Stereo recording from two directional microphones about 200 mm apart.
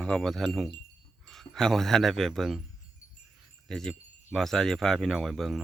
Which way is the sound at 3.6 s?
Centre (ahead or behind).